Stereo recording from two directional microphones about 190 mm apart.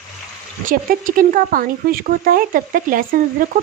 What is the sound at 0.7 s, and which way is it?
Speech, 45° right (ahead or behind).